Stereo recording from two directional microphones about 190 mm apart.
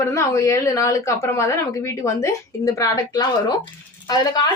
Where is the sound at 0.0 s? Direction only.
15° left (ahead or behind).